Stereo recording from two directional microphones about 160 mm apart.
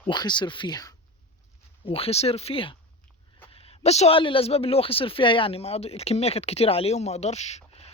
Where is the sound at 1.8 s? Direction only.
35° left (ahead or behind).